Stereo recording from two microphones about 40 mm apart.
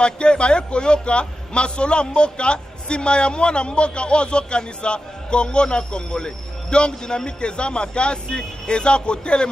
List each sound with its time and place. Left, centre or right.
0.0 s a man's voice: left